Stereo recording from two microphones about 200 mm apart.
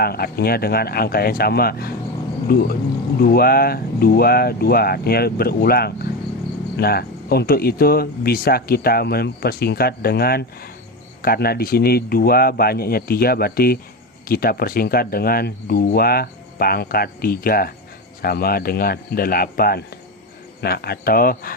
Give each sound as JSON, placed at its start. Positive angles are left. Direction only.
{"t": 0.0, "sound": "speech", "side_deg": 50}